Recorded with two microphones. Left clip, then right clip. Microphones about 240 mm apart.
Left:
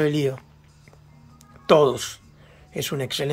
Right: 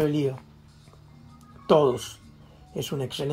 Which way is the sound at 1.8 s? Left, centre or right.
Left.